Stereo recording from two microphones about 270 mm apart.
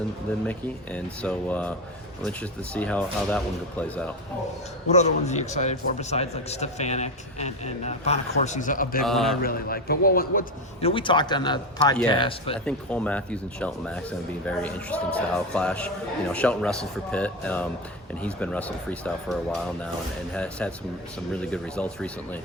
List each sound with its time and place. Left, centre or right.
0.9 s speech: centre
4.9 s a man's voice: left
9.0 s speech: centre
9.4 s a man's voice: left
10.8 s speech: centre
12.6 s speech: centre